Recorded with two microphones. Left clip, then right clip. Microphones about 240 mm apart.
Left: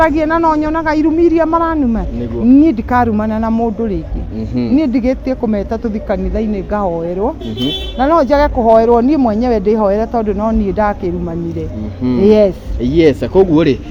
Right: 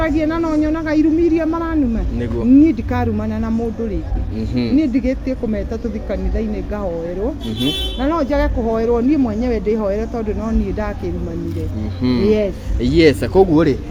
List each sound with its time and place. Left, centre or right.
0.0 s speech: left
4.4 s speech: centre
4.8 s speech: left
7.9 s speech: left
12.2 s speech: left
12.8 s speech: centre